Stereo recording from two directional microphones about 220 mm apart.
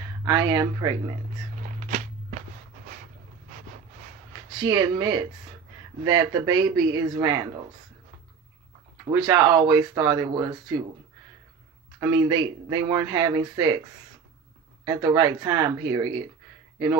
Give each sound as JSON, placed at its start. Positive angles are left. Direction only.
{"t": 0.2, "sound": "speech", "side_deg": -15}
{"t": 1.8, "sound": "walk", "side_deg": -35}
{"t": 4.5, "sound": "speech", "side_deg": -20}
{"t": 9.1, "sound": "speech", "side_deg": -20}
{"t": 12.0, "sound": "speech", "side_deg": -15}
{"t": 14.9, "sound": "speech", "side_deg": -15}